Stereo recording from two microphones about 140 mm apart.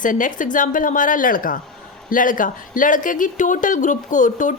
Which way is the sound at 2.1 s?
75° left (ahead or behind).